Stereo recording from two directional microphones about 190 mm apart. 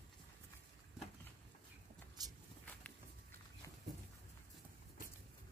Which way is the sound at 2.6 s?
10° left (ahead or behind).